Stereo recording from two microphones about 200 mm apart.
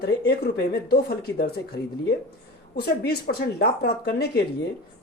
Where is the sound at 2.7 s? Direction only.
50° left (ahead or behind).